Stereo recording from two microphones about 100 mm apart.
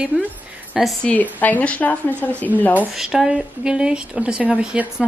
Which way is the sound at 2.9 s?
5° right (ahead or behind).